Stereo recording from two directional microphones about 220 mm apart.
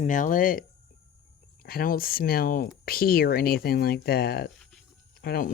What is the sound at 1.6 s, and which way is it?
Speech, 40° left (ahead or behind).